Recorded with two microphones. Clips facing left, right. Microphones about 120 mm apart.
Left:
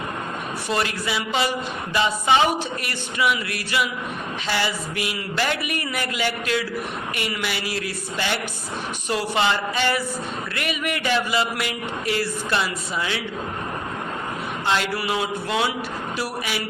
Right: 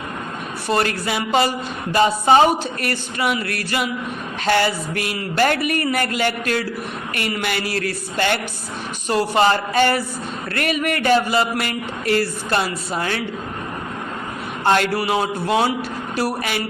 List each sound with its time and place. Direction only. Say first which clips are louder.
0.7 s speech: right 5 dB; 50° right (ahead or behind)
2.0 s music: right 5 dB; 40° right (ahead or behind)
4.4 s speech: right 8 dB; 50° right (ahead or behind)
9.0 s speech: right 6 dB; 40° right (ahead or behind)
14.6 s a man's voice: right 6 dB; 50° right (ahead or behind)
14.9 s music: right 4 dB; 35° right (ahead or behind)
16.1 s a woman's voice: right 7 dB; 55° right (ahead or behind)